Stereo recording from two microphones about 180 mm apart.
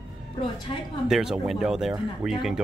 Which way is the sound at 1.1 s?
Centre (ahead or behind).